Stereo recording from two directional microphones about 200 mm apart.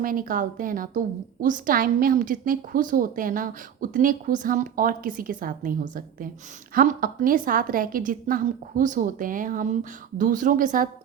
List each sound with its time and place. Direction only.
0.0 s a woman's voice: 45° right (ahead or behind)